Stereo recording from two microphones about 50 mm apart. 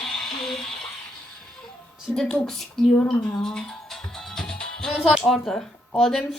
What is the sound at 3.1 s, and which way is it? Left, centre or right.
Music, centre.